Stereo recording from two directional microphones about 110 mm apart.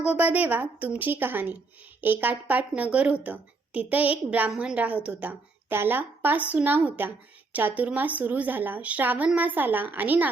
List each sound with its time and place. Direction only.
0.0 s a woman's voice: 10° right (ahead or behind)